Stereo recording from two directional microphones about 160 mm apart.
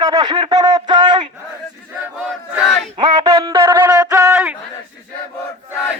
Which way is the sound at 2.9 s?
25° right (ahead or behind).